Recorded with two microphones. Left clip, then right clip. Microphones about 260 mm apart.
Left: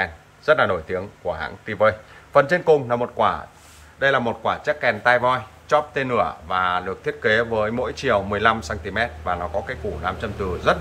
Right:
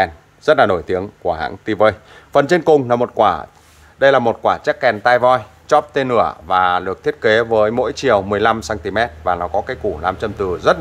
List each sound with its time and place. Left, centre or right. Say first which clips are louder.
0.0 s speech: right 7 dB; right